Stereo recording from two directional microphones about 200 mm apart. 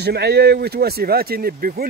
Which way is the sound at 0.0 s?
55° right (ahead or behind).